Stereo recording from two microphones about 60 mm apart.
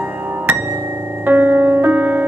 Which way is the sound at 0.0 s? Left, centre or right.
Right.